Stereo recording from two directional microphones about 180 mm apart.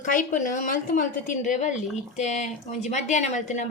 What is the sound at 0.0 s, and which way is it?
A woman's voice, 45° left (ahead or behind).